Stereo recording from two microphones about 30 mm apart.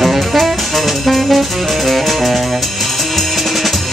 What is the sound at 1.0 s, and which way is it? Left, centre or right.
Saxophone, centre.